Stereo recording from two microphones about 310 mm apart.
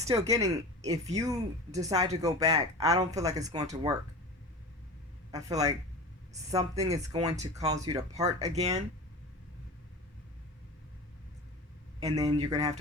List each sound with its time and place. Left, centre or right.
0.0 s speech: centre
5.3 s speech: centre
11.9 s speech: centre